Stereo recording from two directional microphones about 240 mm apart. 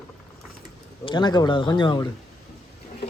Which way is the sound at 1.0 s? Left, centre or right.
Centre.